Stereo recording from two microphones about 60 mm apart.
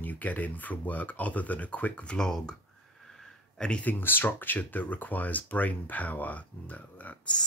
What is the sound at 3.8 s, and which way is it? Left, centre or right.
Speech, left.